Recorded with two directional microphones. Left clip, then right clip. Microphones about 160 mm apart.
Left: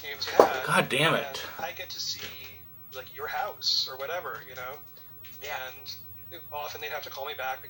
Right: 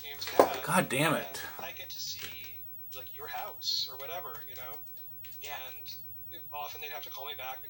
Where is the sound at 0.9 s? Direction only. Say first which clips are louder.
Left 4 dB; 50° right (ahead or behind).